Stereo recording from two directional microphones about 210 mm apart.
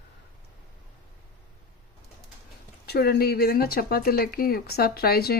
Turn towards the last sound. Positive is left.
turn(degrees=45)  # may be behind; listen again after turning